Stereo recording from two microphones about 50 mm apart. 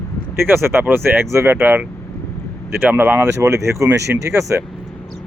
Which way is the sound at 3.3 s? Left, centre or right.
Right.